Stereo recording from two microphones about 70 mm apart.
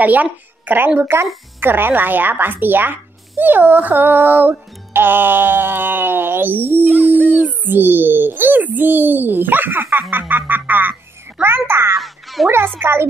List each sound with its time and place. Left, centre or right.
0.0 s speech: right
6.9 s speech: centre
7.3 s a child's voice: right
12.0 s music: centre
12.4 s a child's voice: right